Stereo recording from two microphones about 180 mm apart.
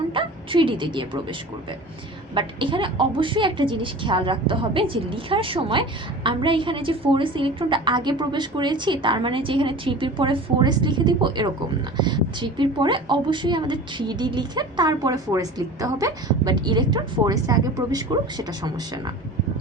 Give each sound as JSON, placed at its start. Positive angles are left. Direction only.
{"t": 0.1, "sound": "a woman's voice", "side_deg": -30}